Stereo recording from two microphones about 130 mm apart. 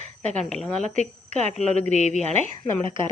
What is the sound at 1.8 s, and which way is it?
Speech, 55° left (ahead or behind).